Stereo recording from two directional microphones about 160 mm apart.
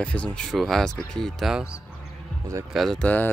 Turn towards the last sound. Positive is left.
turn(degrees=10)  # may be behind; listen again after turning